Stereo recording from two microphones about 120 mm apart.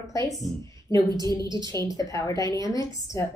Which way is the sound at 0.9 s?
35° right (ahead or behind).